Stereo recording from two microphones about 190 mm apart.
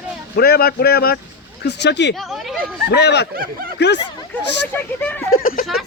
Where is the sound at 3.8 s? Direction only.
65° left (ahead or behind).